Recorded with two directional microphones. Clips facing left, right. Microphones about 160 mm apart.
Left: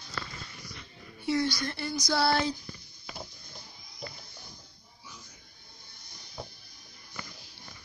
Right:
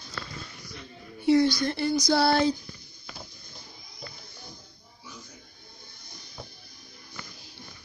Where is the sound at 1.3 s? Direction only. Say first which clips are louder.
Right 7 dB; 25° right (ahead or behind).